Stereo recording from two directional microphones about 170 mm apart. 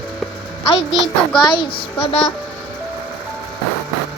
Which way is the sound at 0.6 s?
35° left (ahead or behind).